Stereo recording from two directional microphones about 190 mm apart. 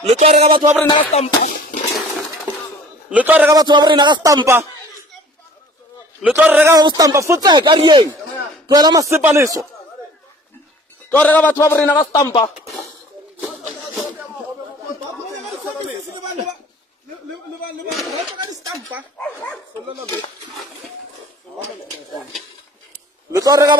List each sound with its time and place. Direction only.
0.0 s music: 35° right (ahead or behind)
0.8 s music: 30° left (ahead or behind)
3.1 s a man's voice: 10° right (ahead or behind)
3.5 s speech: 25° right (ahead or behind)
6.2 s a man's voice: 5° right (ahead or behind)
11.1 s a man's voice: 10° left (ahead or behind)
17.9 s speech: centre (ahead or behind)
18.4 s speech: 20° right (ahead or behind)
19.1 s a man's voice: 10° left (ahead or behind)
23.3 s speech: 20° right (ahead or behind)